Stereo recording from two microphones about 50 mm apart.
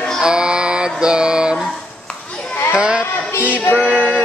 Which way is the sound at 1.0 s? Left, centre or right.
Centre.